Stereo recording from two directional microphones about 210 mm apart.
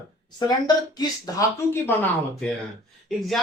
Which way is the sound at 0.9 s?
15° left (ahead or behind).